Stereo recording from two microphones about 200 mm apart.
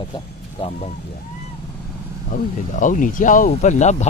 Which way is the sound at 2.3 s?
40° left (ahead or behind).